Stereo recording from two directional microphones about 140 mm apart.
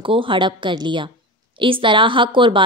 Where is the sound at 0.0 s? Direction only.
35° right (ahead or behind).